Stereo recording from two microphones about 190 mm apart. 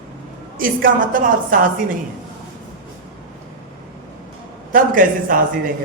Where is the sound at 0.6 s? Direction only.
45° right (ahead or behind).